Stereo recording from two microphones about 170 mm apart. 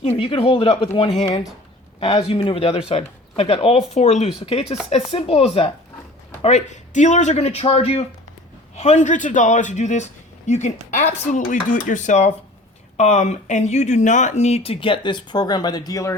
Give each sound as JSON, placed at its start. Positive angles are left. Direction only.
{"t": 0.0, "sound": "speech", "side_deg": 30}